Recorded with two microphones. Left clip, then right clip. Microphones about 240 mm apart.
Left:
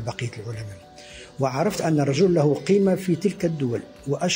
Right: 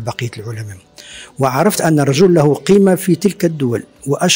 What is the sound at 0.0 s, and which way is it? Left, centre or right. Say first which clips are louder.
A man's voice: right 8 dB; right.